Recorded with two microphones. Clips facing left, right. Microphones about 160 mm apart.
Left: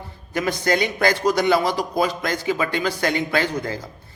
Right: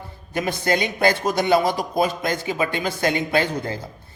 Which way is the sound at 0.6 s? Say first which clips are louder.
Right 1 dB; 20° right (ahead or behind).